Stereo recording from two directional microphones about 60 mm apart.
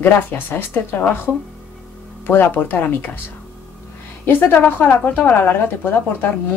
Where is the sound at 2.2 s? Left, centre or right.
Left.